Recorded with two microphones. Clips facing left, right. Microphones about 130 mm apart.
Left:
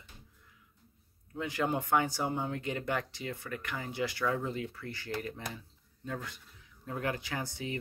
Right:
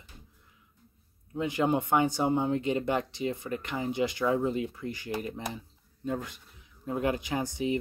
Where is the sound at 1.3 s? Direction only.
20° right (ahead or behind).